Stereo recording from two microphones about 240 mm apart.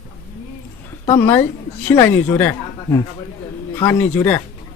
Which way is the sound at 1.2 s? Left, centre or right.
Centre.